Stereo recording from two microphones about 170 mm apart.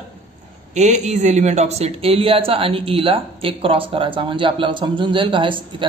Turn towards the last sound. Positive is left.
turn(degrees=-30)  # may be behind; listen again after turning